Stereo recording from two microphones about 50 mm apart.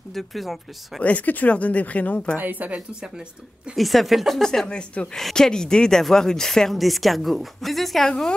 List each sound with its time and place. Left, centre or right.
0.1 s a woman's voice: centre
1.0 s speech: left
2.3 s speech: right
3.0 s speech: centre
3.7 s a woman's voice: centre
4.6 s speech: centre